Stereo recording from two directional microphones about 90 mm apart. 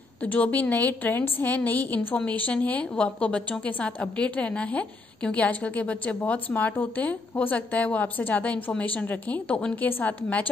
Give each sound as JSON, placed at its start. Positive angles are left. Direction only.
{"t": 0.2, "sound": "a woman's voice", "side_deg": 20}